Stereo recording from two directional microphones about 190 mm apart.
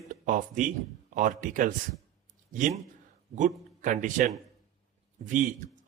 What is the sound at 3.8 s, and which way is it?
Speech, 40° right (ahead or behind).